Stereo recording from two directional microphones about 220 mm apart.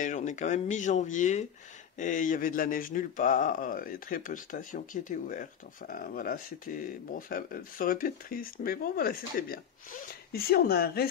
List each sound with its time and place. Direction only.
0.0 s speech: 35° left (ahead or behind)